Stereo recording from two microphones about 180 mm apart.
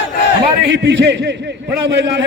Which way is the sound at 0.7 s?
80° right.